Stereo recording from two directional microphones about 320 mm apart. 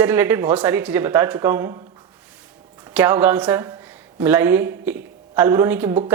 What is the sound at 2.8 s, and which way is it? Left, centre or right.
Speech, centre.